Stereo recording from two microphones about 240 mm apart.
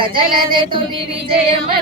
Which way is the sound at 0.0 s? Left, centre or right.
Right.